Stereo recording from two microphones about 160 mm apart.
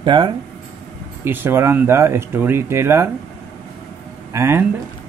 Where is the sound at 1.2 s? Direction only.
15° right (ahead or behind).